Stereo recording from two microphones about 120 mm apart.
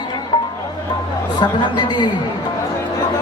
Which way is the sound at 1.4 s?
40° left (ahead or behind).